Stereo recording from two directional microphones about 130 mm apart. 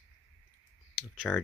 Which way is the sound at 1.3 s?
10° left (ahead or behind).